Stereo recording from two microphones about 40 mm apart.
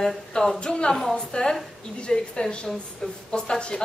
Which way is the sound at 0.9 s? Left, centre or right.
Centre.